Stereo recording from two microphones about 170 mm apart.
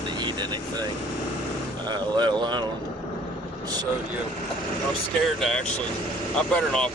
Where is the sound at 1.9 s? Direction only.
25° right (ahead or behind).